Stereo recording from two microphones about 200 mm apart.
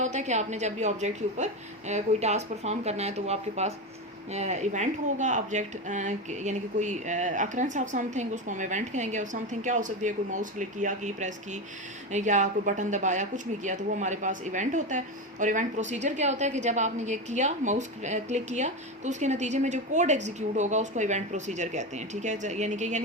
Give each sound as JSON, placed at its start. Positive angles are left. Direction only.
{"t": 0.0, "sound": "a woman's voice", "side_deg": -35}